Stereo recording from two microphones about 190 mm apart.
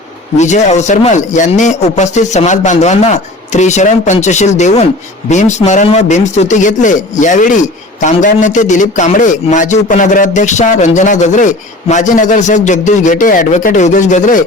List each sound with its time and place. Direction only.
0.3 s a man's voice: 40° left (ahead or behind)